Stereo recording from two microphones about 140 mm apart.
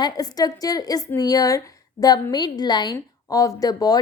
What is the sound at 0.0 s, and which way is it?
A woman's voice, 25° left (ahead or behind).